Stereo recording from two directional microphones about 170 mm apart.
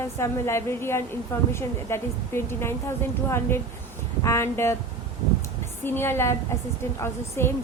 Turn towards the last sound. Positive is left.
turn(degrees=15)  # may be behind; listen again after turning